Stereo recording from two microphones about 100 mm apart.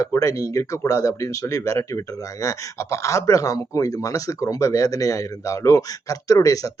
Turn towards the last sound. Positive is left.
turn(degrees=35)  # may be behind; listen again after turning